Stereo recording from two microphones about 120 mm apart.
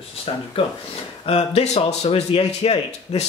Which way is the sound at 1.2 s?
60° left (ahead or behind).